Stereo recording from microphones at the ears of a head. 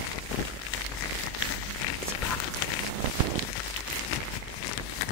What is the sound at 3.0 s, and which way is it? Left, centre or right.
Walk, right.